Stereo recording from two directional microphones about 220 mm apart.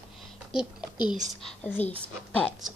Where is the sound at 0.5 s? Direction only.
5° right (ahead or behind).